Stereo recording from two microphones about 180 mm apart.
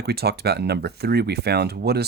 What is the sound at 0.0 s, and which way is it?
Speech, 65° right (ahead or behind).